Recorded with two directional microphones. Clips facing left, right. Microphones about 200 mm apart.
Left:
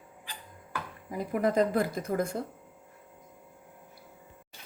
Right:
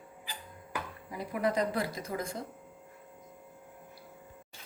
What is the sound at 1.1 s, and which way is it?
A woman's voice, 45° left (ahead or behind).